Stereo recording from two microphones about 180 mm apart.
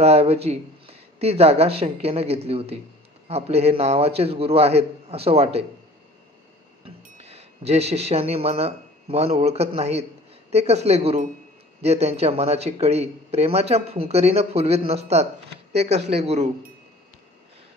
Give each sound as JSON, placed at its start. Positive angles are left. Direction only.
{"t": 0.0, "sound": "speech", "side_deg": -35}
{"t": 6.8, "sound": "speech", "side_deg": -35}